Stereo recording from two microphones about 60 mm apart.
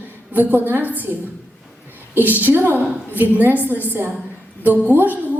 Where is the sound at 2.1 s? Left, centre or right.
Right.